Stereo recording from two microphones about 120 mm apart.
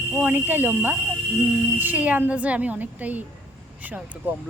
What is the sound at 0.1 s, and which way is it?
A woman's voice, 10° right (ahead or behind).